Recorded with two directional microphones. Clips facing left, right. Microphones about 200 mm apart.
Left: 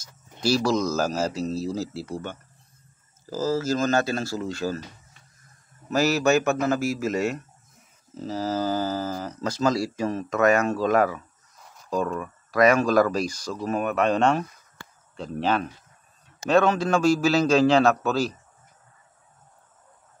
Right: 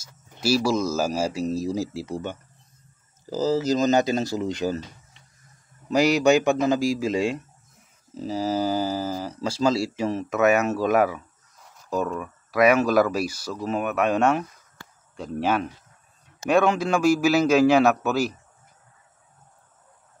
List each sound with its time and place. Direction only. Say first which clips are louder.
0.0 s speech: left 1 dB; 10° right (ahead or behind)